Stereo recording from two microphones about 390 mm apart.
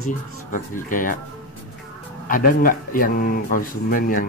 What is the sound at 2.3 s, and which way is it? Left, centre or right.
Speech, left.